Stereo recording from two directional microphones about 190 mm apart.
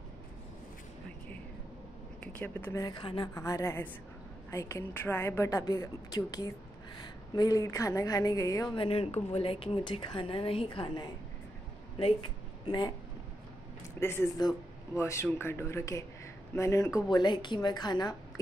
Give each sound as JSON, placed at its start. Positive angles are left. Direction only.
{"t": 2.3, "sound": "a woman's voice", "side_deg": 10}
{"t": 3.3, "sound": "a woman's voice", "side_deg": 15}
{"t": 8.7, "sound": "a woman's voice", "side_deg": 30}
{"t": 12.6, "sound": "speech", "side_deg": 25}
{"t": 13.9, "sound": "a woman's voice", "side_deg": 15}